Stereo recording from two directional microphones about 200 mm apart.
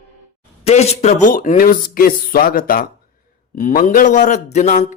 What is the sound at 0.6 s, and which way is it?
A man's voice, 35° left (ahead or behind).